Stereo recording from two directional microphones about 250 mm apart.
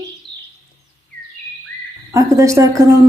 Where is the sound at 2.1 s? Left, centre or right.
Centre.